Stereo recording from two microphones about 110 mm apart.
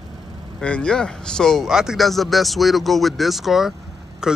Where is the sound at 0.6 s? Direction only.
10° left (ahead or behind).